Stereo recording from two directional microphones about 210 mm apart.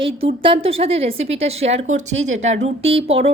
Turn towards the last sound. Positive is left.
turn(degrees=-30)  # may be behind; listen again after turning